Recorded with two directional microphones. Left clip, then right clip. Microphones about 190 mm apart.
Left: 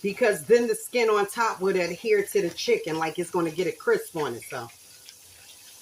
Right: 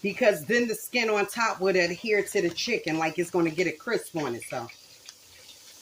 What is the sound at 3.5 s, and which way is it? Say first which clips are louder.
Speech: left 3 dB; 30° right (ahead or behind).